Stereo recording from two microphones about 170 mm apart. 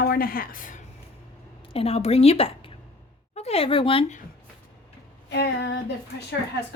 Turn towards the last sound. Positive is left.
turn(degrees=85)